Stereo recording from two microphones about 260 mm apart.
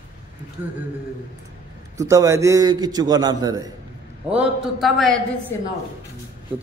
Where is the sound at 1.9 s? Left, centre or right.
Centre.